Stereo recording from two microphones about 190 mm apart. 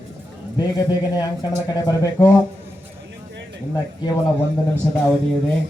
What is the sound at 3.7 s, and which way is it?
Speech, 20° left (ahead or behind).